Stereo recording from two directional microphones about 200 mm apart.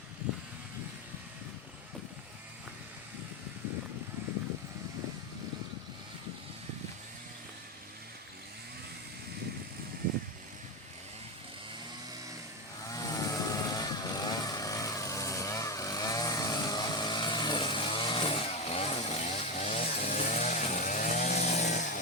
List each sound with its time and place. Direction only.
12.9 s vehicle: 15° left (ahead or behind); by 21.9 s 35° left (ahead or behind)